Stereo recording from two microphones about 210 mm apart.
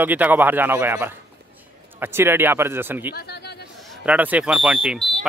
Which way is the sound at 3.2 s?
50° left (ahead or behind).